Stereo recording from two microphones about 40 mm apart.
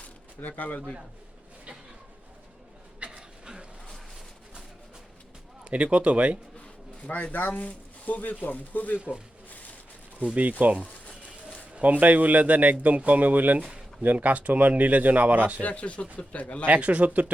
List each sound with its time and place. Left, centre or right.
0.0 s a sound: left
3.1 s a sound: centre
5.6 s a man's voice: right
7.3 s speech: left
9.0 s speech: right
10.6 s a man's voice: right
15.6 s speech: left
16.6 s a man's voice: right